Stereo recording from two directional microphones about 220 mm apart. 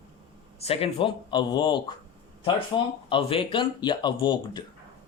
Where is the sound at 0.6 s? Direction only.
25° left (ahead or behind).